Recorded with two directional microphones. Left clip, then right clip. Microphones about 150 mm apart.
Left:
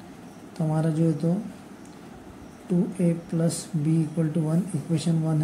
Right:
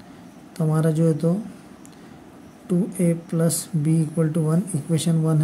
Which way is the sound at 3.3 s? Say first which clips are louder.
Right 4 dB; 45° right (ahead or behind).